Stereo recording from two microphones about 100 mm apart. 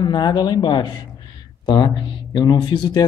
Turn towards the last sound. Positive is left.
turn(degrees=50)  # may be behind; listen again after turning